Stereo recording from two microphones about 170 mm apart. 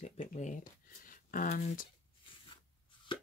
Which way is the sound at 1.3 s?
55° left (ahead or behind).